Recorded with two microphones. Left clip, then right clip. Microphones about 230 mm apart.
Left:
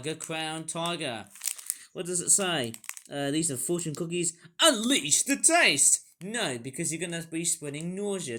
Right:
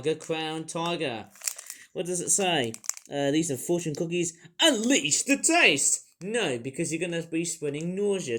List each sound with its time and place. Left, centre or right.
0.0 s speech: left